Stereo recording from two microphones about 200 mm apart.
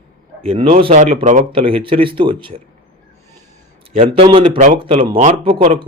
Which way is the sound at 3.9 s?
30° right (ahead or behind).